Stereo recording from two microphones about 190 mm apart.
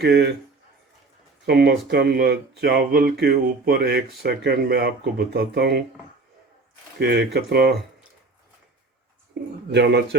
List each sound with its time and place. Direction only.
0.0 s speech: 60° right (ahead or behind)
1.5 s speech: 55° right (ahead or behind)
7.0 s speech: 60° right (ahead or behind)
9.7 s speech: 65° right (ahead or behind)